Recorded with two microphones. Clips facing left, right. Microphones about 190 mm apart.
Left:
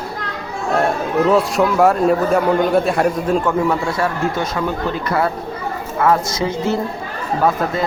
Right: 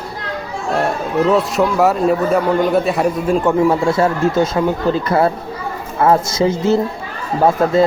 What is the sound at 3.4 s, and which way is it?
Speech, 25° right (ahead or behind).